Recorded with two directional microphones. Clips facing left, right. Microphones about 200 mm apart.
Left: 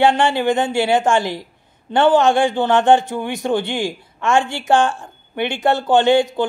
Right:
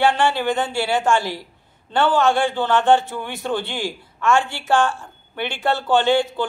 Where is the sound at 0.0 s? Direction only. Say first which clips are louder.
Left 3 dB; 15° left (ahead or behind).